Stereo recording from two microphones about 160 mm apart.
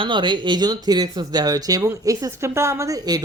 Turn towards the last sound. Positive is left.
turn(degrees=-25)  # may be behind; listen again after turning